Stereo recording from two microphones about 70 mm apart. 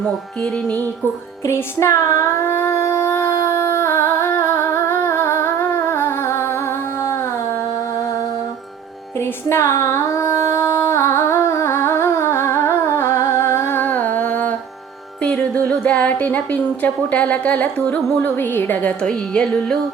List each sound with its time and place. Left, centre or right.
1.5 s a sound: left
9.6 s music: left
15.2 s speech: centre